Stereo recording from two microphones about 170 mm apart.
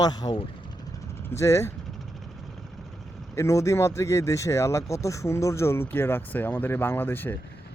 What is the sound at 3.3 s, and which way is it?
Speech, 15° left (ahead or behind).